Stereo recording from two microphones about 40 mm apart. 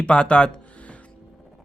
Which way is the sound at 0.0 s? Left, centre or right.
Left.